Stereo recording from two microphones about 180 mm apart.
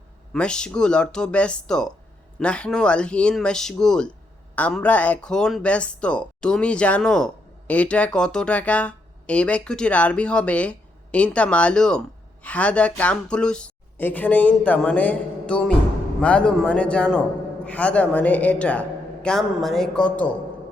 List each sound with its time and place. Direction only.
0.3 s speech: 5° left (ahead or behind)